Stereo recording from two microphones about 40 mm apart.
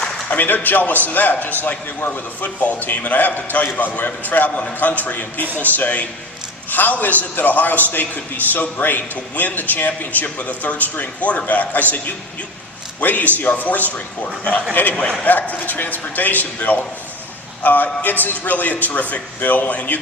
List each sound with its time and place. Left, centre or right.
0.3 s a man's voice: left
5.5 s a man's voice: right
5.7 s a man's voice: left
13.0 s a man's voice: left